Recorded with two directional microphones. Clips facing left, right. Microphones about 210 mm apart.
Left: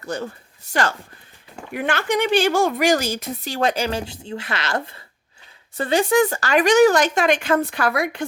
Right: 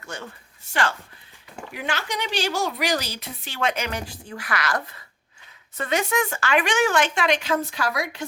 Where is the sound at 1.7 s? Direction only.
55° left (ahead or behind); by 4.8 s 25° left (ahead or behind).